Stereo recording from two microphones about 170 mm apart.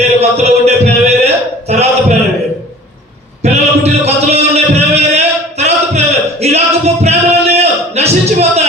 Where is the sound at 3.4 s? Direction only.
40° right (ahead or behind).